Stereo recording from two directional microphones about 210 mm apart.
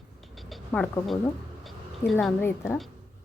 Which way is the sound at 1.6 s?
Centre (ahead or behind).